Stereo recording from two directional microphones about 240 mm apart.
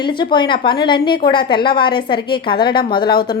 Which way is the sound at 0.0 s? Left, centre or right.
Centre.